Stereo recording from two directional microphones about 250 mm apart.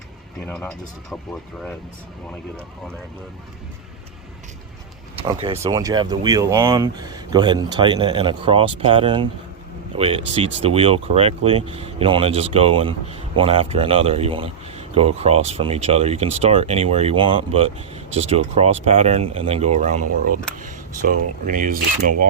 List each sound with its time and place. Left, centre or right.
0.4 s speech: centre
5.3 s speech: centre